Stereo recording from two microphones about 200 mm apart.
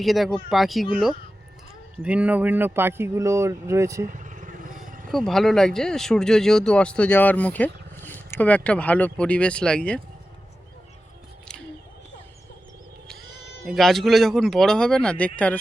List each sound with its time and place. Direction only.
0.0 s speech: centre (ahead or behind)
4.0 s vehicle: 40° right (ahead or behind)
5.1 s speech: centre (ahead or behind)
13.7 s speech: centre (ahead or behind)